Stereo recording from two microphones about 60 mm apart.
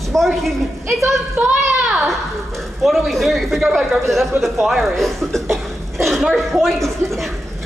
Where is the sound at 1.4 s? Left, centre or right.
Right.